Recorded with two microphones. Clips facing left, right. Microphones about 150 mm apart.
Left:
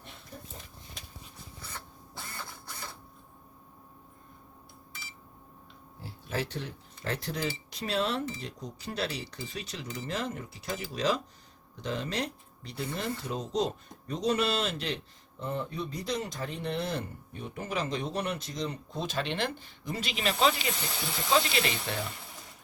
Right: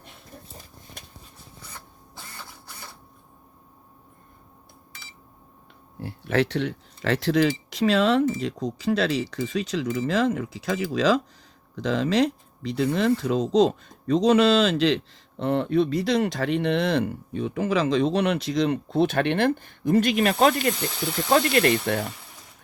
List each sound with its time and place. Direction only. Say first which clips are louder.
2.3 s printer: even; 10° right (ahead or behind)
6.0 s speech: right 11 dB; 65° right (ahead or behind)